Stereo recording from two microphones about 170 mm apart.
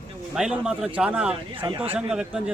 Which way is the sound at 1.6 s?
30° right (ahead or behind).